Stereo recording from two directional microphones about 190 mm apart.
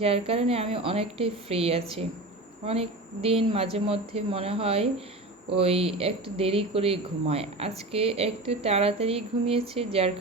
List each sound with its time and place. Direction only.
0.0 s speech: 30° right (ahead or behind)